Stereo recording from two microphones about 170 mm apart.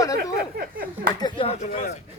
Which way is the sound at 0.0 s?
20° left (ahead or behind).